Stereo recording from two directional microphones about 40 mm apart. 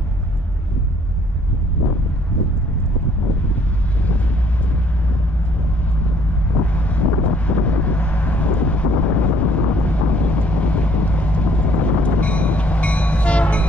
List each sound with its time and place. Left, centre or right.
3.5 s vehicle: left
6.6 s vehicle: left